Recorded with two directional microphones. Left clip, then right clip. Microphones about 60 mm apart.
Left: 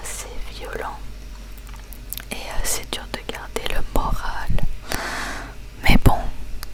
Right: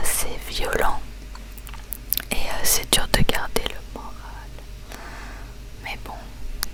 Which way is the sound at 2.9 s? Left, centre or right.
Right.